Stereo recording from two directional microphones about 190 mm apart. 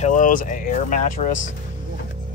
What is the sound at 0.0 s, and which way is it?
Speech, 45° left (ahead or behind).